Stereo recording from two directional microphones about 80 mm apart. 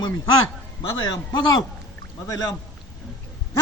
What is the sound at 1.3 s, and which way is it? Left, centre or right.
Speech, left.